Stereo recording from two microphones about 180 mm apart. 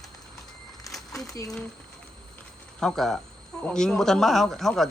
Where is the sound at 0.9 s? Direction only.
20° left (ahead or behind).